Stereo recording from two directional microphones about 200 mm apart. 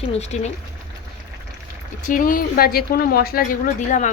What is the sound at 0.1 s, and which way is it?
Speech, 35° left (ahead or behind).